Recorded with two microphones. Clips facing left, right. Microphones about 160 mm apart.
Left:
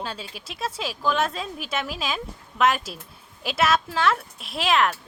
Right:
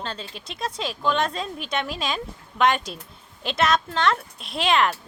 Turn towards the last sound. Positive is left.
turn(degrees=0)  # may be behind; listen again after turning